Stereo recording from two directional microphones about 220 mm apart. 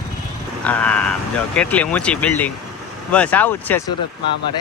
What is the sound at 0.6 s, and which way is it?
Speech, 5° left (ahead or behind).